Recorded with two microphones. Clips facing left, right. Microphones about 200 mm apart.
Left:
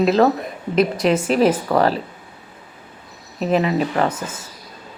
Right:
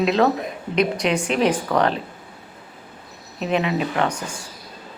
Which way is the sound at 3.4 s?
40° left (ahead or behind).